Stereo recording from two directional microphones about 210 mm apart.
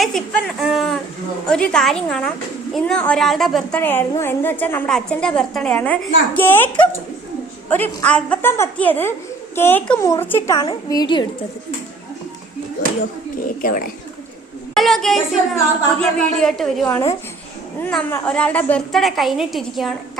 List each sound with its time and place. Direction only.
0.0 s a woman's voice: centre (ahead or behind)
7.7 s a woman's voice: 5° left (ahead or behind)
13.6 s speech: 40° left (ahead or behind)
14.8 s a woman's voice: centre (ahead or behind)
16.8 s a woman's voice: 15° left (ahead or behind)